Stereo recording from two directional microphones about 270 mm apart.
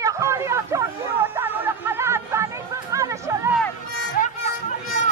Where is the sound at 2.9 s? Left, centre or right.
Centre.